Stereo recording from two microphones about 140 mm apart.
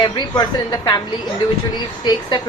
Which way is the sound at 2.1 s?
30° left (ahead or behind).